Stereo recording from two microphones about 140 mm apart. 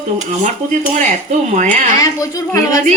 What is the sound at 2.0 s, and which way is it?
Speech, 25° left (ahead or behind).